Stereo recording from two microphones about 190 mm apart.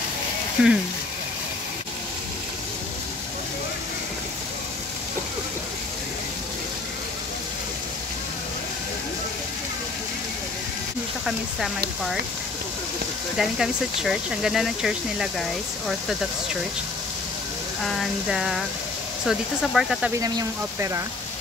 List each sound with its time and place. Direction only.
0.6 s speech: 5° right (ahead or behind)
11.2 s speech: centre (ahead or behind)
13.4 s speech: centre (ahead or behind)
17.8 s speech: centre (ahead or behind)
20.2 s speech: 20° right (ahead or behind)